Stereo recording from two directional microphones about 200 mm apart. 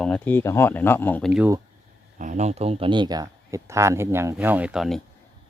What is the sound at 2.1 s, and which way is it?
Speech, 35° right (ahead or behind).